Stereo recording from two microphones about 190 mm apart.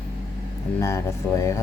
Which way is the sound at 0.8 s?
15° left (ahead or behind).